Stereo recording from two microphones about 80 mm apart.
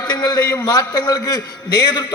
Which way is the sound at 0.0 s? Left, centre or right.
Left.